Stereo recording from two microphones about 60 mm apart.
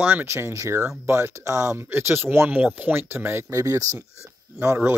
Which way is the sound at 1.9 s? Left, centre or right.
Right.